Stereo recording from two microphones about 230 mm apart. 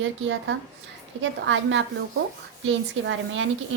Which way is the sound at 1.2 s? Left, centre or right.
Right.